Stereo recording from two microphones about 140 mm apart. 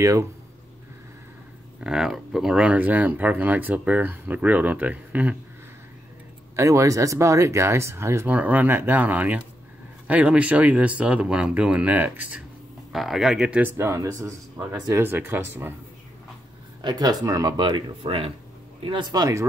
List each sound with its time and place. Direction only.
0.0 s speech: 20° right (ahead or behind)
1.8 s speech: 5° right (ahead or behind)
6.5 s speech: 20° right (ahead or behind)
16.8 s speech: 25° right (ahead or behind)